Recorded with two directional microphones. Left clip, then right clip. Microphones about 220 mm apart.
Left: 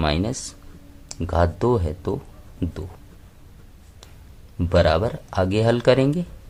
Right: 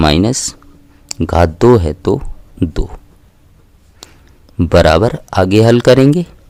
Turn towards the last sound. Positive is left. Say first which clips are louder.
# right 10 dB
turn(degrees=-50)  # may be behind; listen again after turning